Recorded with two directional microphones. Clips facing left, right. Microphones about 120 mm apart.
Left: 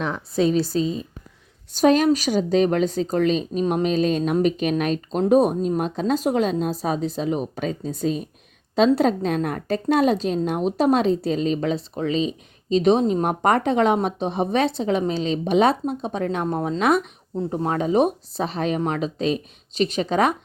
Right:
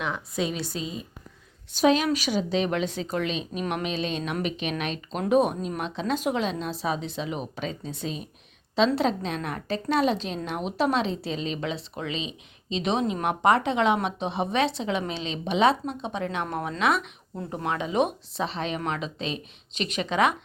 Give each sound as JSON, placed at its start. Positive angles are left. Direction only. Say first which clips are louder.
{"t": 0.3, "sound": "a woman's voice", "louder": "left 12 dB", "side_deg": 35}
{"t": 3.6, "sound": "a sound", "louder": "left 6 dB", "side_deg": 25}
{"t": 3.8, "sound": "a woman's voice", "louder": "left 9 dB", "side_deg": 45}